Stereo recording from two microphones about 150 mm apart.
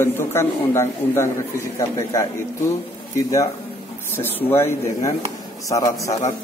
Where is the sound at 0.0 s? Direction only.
15° left (ahead or behind).